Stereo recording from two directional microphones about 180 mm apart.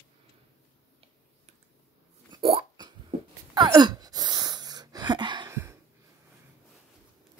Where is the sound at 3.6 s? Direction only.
20° right (ahead or behind).